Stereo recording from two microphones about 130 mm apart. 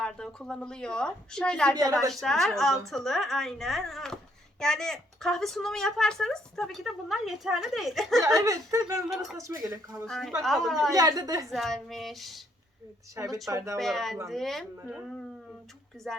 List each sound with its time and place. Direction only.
0.0 s a woman's voice: 5° left (ahead or behind)
1.7 s speech: 25° right (ahead or behind)
2.2 s a woman's voice: 5° left (ahead or behind)
8.2 s speech: 25° right (ahead or behind)
9.9 s a woman's voice: centre (ahead or behind)
10.9 s speech: 30° right (ahead or behind)
11.5 s a woman's voice: centre (ahead or behind)
13.3 s speech: 25° right (ahead or behind)
13.7 s a woman's voice: centre (ahead or behind)
16.1 s a woman's voice: 5° left (ahead or behind)